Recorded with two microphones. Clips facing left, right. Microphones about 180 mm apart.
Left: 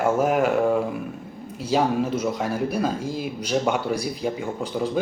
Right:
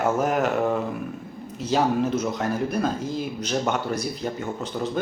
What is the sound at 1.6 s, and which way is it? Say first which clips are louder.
Speech: even; 10° left (ahead or behind).